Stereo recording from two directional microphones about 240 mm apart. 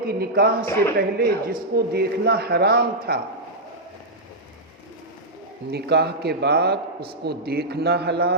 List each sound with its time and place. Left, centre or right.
0.0 s speech: right
5.7 s a man's voice: right